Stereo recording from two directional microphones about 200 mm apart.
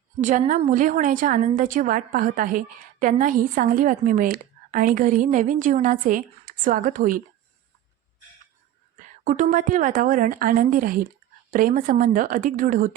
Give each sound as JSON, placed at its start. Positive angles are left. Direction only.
{"t": 0.2, "sound": "a woman's voice", "side_deg": -40}
{"t": 9.0, "sound": "a woman's voice", "side_deg": -40}